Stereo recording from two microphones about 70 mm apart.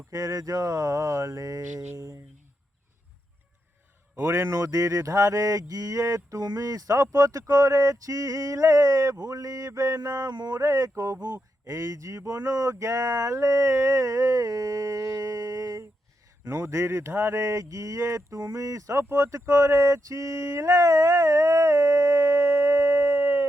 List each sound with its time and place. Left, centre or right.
0.1 s speech: right
4.1 s mantra: right
9.2 s speech: right
10.6 s mantra: right
16.4 s mantra: right
19.0 s a sound: right